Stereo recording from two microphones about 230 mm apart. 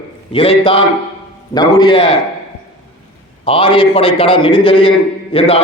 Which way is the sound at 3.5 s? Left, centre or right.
Left.